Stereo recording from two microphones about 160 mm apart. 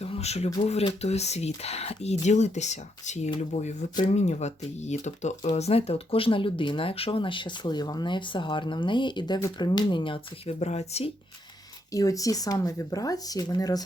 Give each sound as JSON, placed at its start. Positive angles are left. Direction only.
{"t": 0.0, "sound": "a sound", "side_deg": 40}
{"t": 0.6, "sound": "speech", "side_deg": 40}
{"t": 11.9, "sound": "speech", "side_deg": 20}